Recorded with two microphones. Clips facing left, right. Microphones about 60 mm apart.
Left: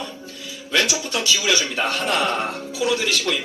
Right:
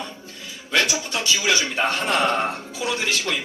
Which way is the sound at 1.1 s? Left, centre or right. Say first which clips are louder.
Left 1 dB; right.